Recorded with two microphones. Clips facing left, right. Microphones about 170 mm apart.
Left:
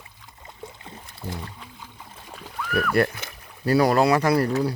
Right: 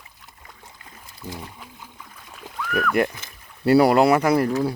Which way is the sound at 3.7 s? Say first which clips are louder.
Right 3 dB; 25° right (ahead or behind).